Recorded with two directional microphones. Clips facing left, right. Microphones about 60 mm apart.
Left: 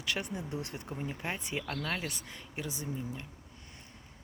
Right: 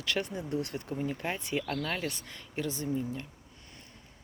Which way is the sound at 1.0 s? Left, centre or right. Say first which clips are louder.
Right 3 dB; centre.